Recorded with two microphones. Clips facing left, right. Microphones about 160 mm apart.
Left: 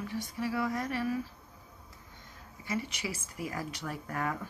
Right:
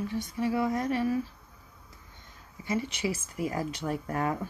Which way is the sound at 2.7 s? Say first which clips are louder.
Right 5 dB; 25° right (ahead or behind).